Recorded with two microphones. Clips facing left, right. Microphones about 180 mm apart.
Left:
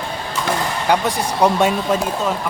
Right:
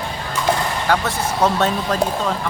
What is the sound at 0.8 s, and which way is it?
Speech, 15° left (ahead or behind).